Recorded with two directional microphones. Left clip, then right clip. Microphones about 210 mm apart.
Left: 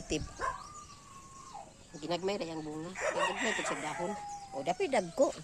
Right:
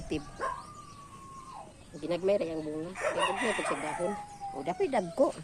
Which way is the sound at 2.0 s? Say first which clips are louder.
Right 6 dB; 40° left (ahead or behind).